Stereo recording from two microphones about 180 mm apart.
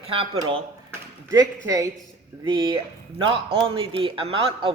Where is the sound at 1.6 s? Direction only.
15° right (ahead or behind).